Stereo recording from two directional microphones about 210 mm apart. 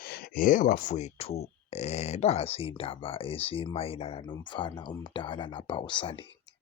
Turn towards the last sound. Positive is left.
turn(degrees=25)  # may be behind; listen again after turning